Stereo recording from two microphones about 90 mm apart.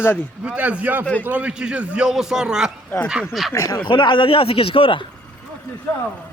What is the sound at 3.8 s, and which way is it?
A man's voice, 65° left (ahead or behind).